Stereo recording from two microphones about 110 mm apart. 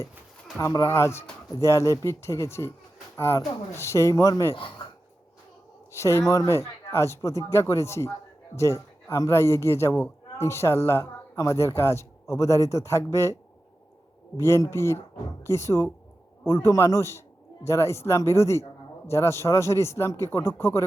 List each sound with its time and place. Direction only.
0.6 s speech: 30° left (ahead or behind)
5.9 s speech: 25° left (ahead or behind)
14.3 s speech: 25° left (ahead or behind)